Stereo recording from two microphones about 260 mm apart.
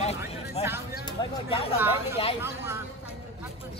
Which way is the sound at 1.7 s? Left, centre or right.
Centre.